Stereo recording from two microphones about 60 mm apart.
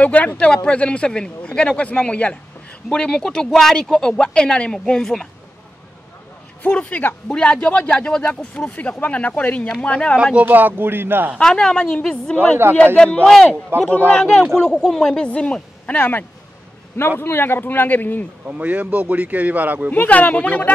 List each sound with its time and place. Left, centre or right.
0.0 s speech: left; by 5.3 s centre
6.6 s speech: left
7.3 s speech: centre
10.3 s speech: right
11.4 s speech: centre
13.7 s speech: right
14.1 s speech: centre; by 18.2 s left
18.5 s speech: right
19.9 s speech: left